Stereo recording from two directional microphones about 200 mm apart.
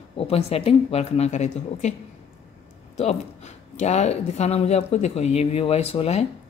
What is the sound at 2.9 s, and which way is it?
Speech, 35° left (ahead or behind).